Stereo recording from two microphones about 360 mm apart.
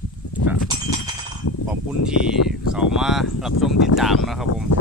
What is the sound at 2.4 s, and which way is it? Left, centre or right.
Speech, left.